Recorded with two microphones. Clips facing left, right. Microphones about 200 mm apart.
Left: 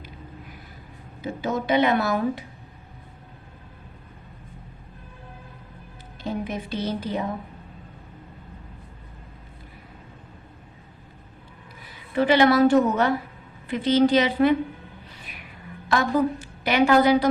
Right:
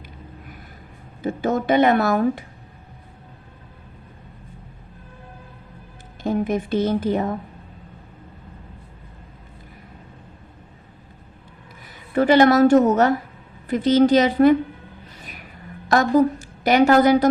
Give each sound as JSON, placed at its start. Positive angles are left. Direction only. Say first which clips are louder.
{"t": 1.2, "sound": "a woman's voice", "louder": "right 5 dB", "side_deg": -50}
{"t": 6.2, "sound": "a woman's voice", "louder": "right 7 dB", "side_deg": -50}
{"t": 12.1, "sound": "a woman's voice", "louder": "right 4 dB", "side_deg": -45}
{"t": 15.2, "sound": "vehicle", "louder": "right 3 dB", "side_deg": -40}
{"t": 15.9, "sound": "a woman's voice", "louder": "right 5 dB", "side_deg": -40}